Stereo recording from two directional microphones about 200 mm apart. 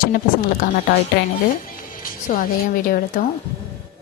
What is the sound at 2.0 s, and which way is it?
Speech, 45° left (ahead or behind).